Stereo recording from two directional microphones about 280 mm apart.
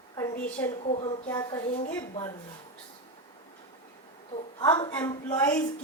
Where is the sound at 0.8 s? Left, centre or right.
Left.